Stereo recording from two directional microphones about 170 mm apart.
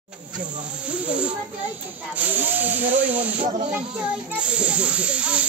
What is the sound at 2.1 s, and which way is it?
Speech, 10° right (ahead or behind).